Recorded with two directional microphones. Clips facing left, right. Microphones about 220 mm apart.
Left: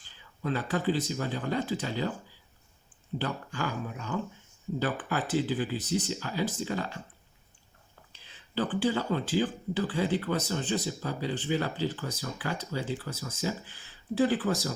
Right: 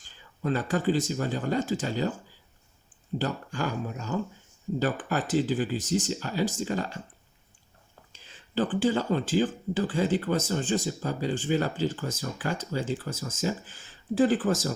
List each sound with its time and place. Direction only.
0.0 s speech: 45° right (ahead or behind)
3.2 s speech: 45° right (ahead or behind)
8.1 s speech: 45° right (ahead or behind)